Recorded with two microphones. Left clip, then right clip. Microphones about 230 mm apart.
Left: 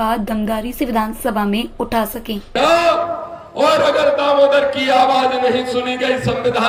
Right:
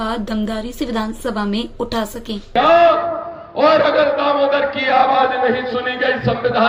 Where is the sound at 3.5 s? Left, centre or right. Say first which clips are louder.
Right 1 dB; left.